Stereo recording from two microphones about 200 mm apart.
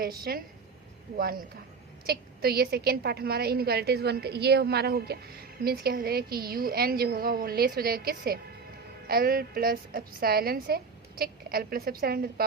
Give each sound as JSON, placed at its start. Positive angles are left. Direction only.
{"t": 0.3, "sound": "a woman's voice", "side_deg": -50}